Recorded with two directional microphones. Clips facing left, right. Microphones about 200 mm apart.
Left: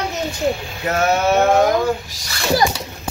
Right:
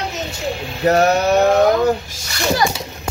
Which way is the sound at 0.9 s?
35° right (ahead or behind).